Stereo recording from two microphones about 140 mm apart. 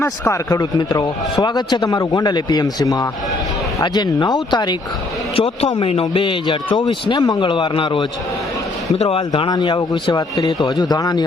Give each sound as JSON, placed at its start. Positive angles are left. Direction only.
{"t": 0.0, "sound": "a man's voice", "side_deg": 20}
{"t": 5.4, "sound": "a man's voice", "side_deg": 45}